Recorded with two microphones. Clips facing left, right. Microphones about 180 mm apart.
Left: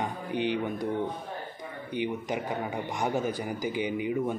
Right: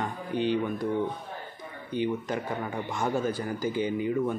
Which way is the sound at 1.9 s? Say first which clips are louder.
Right 2 dB; 15° left (ahead or behind).